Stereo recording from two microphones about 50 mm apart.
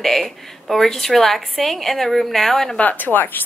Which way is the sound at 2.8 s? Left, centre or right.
Left.